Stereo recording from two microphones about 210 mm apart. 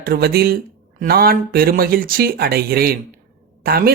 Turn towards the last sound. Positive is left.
turn(degrees=-45)  # may be behind; listen again after turning